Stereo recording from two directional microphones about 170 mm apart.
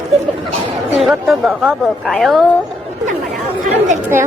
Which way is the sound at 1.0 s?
Centre (ahead or behind).